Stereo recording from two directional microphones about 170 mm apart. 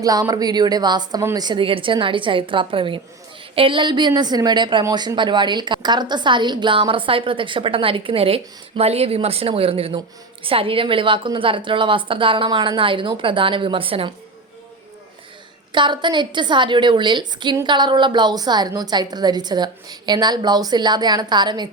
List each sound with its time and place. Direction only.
0.0 s a woman's voice: 20° right (ahead or behind)
15.7 s speech: 25° right (ahead or behind)